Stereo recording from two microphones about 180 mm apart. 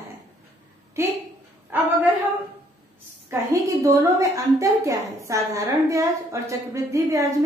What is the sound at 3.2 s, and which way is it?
A woman's voice, 20° right (ahead or behind).